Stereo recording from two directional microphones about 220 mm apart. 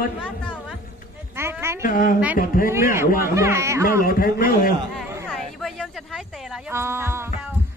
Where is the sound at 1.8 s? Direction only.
40° left (ahead or behind).